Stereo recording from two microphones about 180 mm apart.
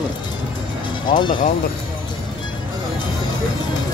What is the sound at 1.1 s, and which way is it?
Speech, 25° left (ahead or behind).